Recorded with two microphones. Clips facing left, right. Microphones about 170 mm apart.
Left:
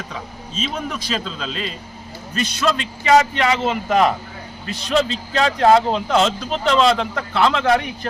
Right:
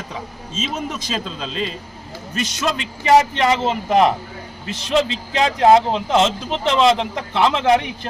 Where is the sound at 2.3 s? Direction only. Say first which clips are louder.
Left 2 dB; 20° right (ahead or behind).